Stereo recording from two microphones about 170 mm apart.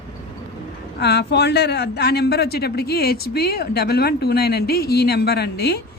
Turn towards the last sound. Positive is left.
turn(degrees=70)  # may be behind; listen again after turning